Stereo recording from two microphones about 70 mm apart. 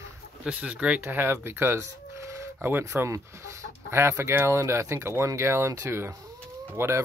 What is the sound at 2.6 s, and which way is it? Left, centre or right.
Speech, right.